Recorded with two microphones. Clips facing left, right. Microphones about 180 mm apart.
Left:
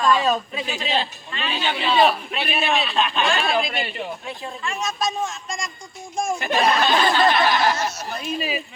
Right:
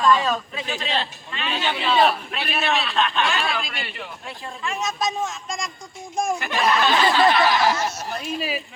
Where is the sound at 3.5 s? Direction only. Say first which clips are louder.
Left 7 dB; 20° left (ahead or behind).